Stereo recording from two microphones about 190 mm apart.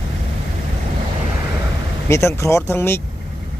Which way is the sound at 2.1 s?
15° left (ahead or behind).